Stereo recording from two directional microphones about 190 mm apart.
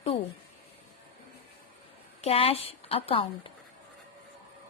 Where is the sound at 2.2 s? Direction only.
30° left (ahead or behind).